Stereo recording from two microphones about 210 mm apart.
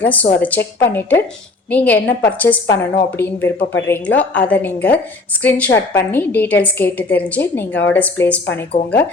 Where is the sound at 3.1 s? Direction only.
10° left (ahead or behind).